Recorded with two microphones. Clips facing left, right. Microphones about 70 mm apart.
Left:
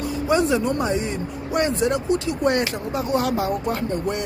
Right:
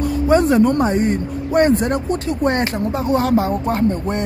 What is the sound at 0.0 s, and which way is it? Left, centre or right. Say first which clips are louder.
Speech: right 5 dB; right.